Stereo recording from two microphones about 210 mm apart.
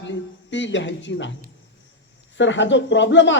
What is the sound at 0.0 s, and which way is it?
A man's voice, 60° left (ahead or behind).